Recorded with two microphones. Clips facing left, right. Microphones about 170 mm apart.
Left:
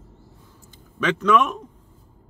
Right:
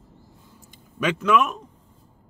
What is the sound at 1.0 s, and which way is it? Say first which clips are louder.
Speech: left 1 dB; 10° right (ahead or behind).